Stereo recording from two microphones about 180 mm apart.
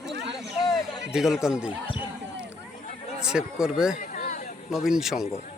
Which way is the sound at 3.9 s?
45° left (ahead or behind).